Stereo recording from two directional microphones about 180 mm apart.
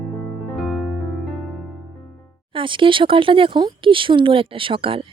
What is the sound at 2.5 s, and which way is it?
Speech, 30° right (ahead or behind).